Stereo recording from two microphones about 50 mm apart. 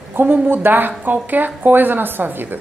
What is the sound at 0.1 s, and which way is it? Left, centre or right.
A woman's voice, right.